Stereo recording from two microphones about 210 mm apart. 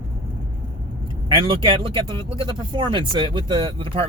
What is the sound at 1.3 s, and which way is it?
Speech, 25° right (ahead or behind).